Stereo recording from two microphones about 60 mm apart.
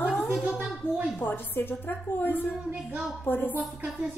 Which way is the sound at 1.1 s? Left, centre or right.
Left.